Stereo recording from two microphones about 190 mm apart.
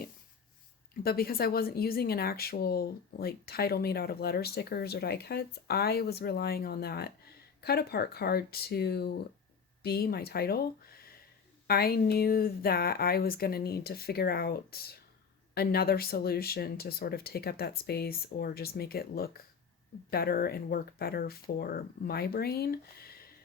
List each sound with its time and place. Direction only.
1.0 s speech: 50° left (ahead or behind)